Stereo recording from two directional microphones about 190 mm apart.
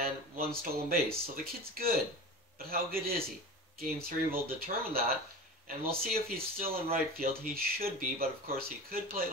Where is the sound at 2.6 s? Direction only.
50° right (ahead or behind).